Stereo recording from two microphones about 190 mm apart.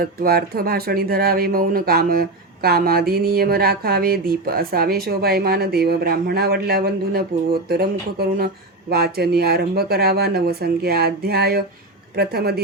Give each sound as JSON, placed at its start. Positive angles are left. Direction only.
{"t": 0.0, "sound": "speech", "side_deg": -50}